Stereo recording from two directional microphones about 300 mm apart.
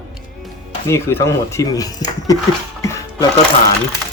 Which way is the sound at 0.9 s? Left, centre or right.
Centre.